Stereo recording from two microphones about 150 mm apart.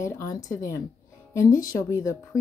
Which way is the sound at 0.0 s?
20° left (ahead or behind).